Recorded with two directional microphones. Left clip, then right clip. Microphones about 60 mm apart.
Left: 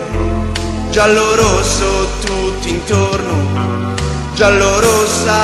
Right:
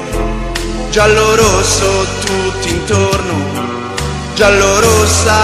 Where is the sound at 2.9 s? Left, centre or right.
Right.